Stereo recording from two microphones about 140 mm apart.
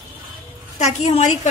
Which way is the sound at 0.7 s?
55° left (ahead or behind).